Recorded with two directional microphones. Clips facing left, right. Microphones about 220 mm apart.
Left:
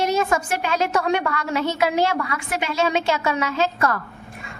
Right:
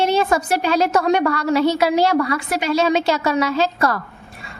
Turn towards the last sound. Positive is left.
turn(degrees=-35)  # may be behind; listen again after turning